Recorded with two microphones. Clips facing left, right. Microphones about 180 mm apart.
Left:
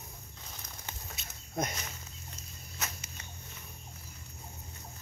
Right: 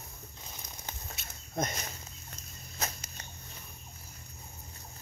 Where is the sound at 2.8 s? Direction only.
35° right (ahead or behind).